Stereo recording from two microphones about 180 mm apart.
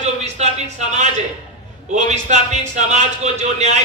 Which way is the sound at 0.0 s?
40° right (ahead or behind).